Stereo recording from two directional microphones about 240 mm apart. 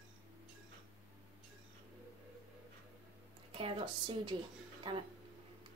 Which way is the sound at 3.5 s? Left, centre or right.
Right.